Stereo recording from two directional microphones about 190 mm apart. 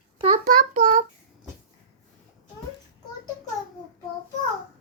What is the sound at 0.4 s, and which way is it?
Child singing, 45° right (ahead or behind).